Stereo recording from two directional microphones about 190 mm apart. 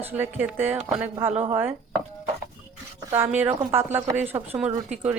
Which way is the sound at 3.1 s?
10° right (ahead or behind).